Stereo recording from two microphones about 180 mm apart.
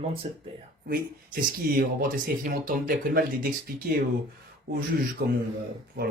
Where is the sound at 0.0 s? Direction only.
30° right (ahead or behind).